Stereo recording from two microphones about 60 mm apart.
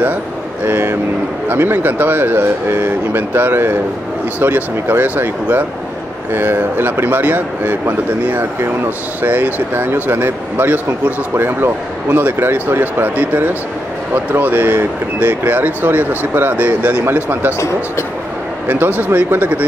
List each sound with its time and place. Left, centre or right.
1.5 s speech: right
9.2 s speech: right
17.0 s speech: right
18.7 s speech: right